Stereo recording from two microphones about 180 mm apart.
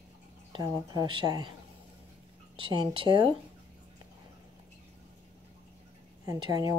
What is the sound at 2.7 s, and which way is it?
Speech, 25° right (ahead or behind).